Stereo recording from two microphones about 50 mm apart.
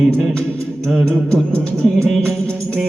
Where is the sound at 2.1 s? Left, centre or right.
Centre.